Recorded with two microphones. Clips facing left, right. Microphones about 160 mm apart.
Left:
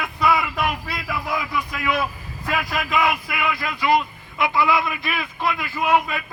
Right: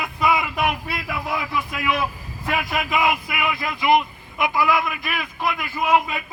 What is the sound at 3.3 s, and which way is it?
A man's voice, 20° right (ahead or behind).